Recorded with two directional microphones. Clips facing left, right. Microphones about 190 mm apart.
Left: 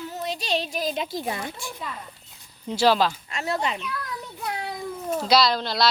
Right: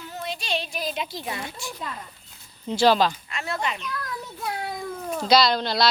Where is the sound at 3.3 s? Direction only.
40° left (ahead or behind).